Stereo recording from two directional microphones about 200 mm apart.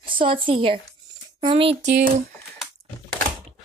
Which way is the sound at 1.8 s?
60° right (ahead or behind).